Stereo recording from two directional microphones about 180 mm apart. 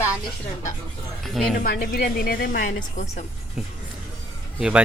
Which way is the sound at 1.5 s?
55° left (ahead or behind).